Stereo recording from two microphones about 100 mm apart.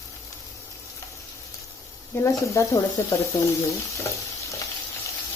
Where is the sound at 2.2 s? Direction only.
30° left (ahead or behind).